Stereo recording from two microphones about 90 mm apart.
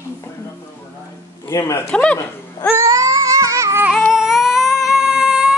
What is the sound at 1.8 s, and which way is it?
Speech, 10° left (ahead or behind).